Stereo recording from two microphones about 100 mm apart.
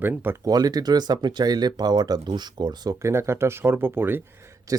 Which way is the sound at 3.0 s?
25° right (ahead or behind).